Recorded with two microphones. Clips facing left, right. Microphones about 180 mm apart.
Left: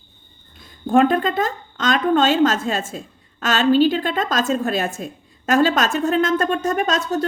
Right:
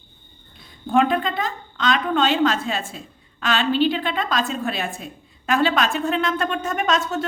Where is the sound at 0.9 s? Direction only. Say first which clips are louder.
Left 3 dB; 45° left (ahead or behind).